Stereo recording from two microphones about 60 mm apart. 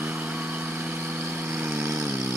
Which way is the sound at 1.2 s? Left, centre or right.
Right.